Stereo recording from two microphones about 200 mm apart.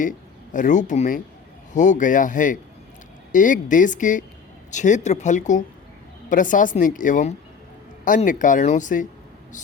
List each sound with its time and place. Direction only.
0.5 s a woman's voice: 40° left (ahead or behind)